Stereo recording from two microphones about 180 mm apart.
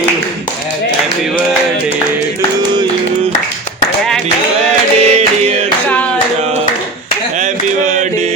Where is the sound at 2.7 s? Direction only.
35° right (ahead or behind).